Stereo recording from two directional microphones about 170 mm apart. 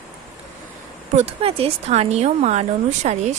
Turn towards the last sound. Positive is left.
turn(degrees=-45)  # may be behind; listen again after turning